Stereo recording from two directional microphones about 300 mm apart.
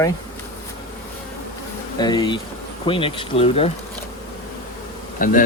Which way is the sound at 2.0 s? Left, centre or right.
Centre.